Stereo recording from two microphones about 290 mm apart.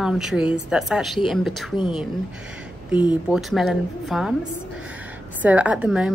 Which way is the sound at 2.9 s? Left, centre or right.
Centre.